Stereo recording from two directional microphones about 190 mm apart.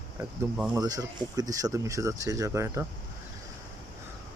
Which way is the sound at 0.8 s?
20° right (ahead or behind).